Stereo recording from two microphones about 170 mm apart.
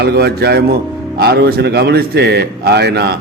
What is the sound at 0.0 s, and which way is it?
Speech, 70° right (ahead or behind).